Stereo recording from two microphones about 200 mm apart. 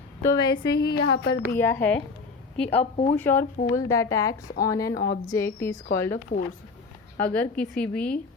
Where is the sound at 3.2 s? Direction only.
10° left (ahead or behind).